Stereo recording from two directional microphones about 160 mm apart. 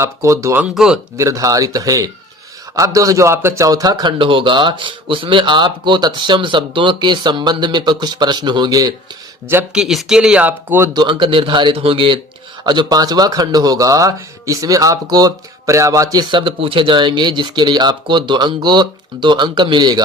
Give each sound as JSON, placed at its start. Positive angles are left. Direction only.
{"t": 0.0, "sound": "speech", "side_deg": -20}
{"t": 0.7, "sound": "speech", "side_deg": -5}
{"t": 1.1, "sound": "speech", "side_deg": -20}
{"t": 9.5, "sound": "speech", "side_deg": -15}
{"t": 9.8, "sound": "speech", "side_deg": 0}
{"t": 10.9, "sound": "a man's voice", "side_deg": -30}